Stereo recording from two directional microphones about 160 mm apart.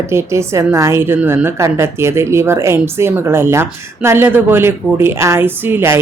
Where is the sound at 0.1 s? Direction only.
15° right (ahead or behind).